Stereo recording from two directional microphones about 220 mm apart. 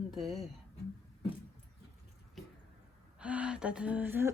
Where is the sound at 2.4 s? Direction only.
Centre (ahead or behind).